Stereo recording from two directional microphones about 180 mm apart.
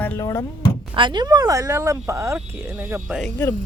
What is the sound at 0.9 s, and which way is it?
Speech, 25° right (ahead or behind).